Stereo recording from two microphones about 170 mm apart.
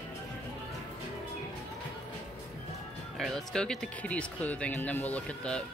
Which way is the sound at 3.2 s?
5° left (ahead or behind).